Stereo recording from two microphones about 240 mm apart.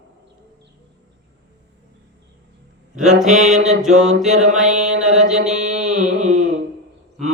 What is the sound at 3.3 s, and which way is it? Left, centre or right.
Mantra, right.